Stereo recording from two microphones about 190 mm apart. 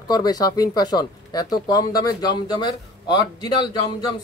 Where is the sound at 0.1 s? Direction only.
20° left (ahead or behind).